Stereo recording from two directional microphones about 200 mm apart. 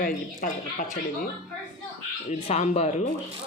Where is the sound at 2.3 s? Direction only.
35° left (ahead or behind).